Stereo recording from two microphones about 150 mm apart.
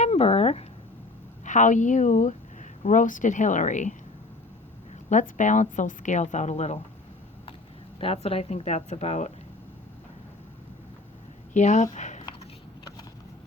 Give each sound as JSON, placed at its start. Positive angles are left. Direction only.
{"t": 0.0, "sound": "speech", "side_deg": 45}
{"t": 1.5, "sound": "a woman's voice", "side_deg": 55}
{"t": 5.0, "sound": "a woman's voice", "side_deg": 55}
{"t": 7.9, "sound": "a woman's voice", "side_deg": 40}
{"t": 11.5, "sound": "a woman's voice", "side_deg": 50}